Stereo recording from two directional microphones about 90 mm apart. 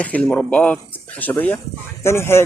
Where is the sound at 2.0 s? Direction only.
30° left (ahead or behind).